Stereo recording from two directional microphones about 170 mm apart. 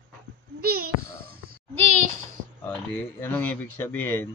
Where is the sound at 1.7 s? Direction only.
35° right (ahead or behind).